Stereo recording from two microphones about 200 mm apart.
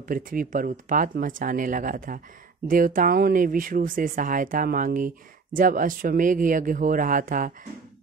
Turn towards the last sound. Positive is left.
turn(degrees=-40)  # may be behind; listen again after turning